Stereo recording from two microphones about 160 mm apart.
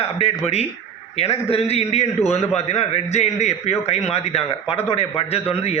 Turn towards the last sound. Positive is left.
turn(degrees=40)  # may be behind; listen again after turning